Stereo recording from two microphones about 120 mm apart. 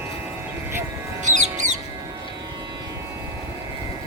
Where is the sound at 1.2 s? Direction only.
85° right.